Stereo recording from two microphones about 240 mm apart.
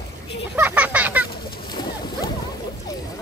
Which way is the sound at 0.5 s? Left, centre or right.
Centre.